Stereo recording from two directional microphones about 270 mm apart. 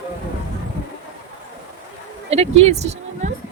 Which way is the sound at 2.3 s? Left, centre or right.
Right.